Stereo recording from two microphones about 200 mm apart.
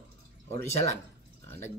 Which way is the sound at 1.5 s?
10° left (ahead or behind).